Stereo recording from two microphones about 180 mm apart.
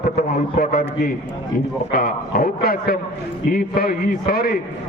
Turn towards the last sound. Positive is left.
turn(degrees=55)  # may be behind; listen again after turning